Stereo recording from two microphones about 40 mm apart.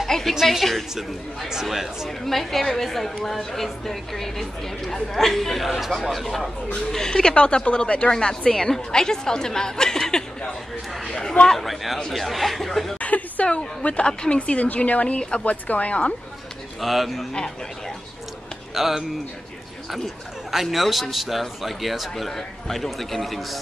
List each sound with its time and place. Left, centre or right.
0.3 s a man's voice: centre
1.5 s speech: centre
2.0 s a man's voice: centre
7.1 s speech: centre
7.3 s a woman's voice: left
11.6 s a man's voice: centre
13.0 s a sound: left
14.4 s speech: left
16.8 s a man's voice: centre
18.8 s a man's voice: centre
20.6 s a man's voice: centre